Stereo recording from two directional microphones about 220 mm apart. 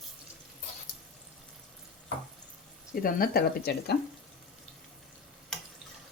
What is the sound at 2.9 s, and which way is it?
Speech, 40° left (ahead or behind).